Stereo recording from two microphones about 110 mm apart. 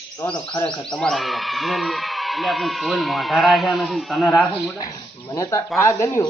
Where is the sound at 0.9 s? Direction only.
5° left (ahead or behind).